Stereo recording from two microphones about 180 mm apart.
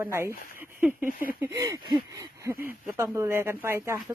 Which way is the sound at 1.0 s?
50° left (ahead or behind).